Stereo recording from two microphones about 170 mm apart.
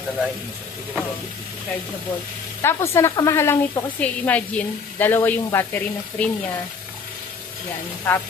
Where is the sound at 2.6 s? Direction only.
15° left (ahead or behind).